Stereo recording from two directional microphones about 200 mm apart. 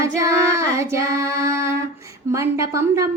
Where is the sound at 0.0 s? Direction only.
15° right (ahead or behind).